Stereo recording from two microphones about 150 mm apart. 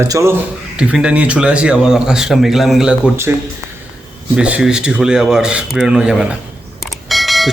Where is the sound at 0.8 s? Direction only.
5° right (ahead or behind).